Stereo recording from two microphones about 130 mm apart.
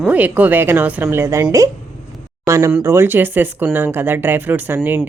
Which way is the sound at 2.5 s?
25° right (ahead or behind).